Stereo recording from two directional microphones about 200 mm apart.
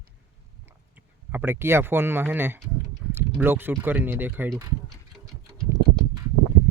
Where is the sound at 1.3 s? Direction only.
10° right (ahead or behind).